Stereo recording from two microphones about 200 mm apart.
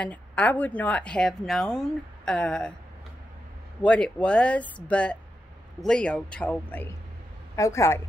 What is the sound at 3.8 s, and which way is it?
A woman's voice, 5° left (ahead or behind).